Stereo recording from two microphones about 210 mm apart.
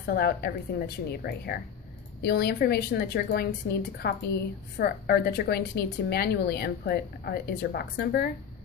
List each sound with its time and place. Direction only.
0.0 s a woman's voice: 50° left (ahead or behind)